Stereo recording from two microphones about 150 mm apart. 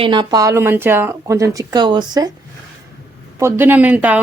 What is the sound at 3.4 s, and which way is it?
Speech, 15° right (ahead or behind).